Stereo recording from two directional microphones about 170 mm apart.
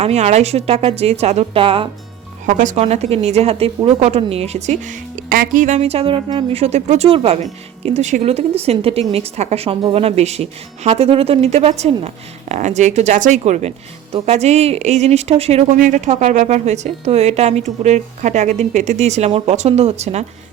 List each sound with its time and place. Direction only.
0.0 s a woman's voice: 40° right (ahead or behind)
2.5 s a woman's voice: 45° right (ahead or behind)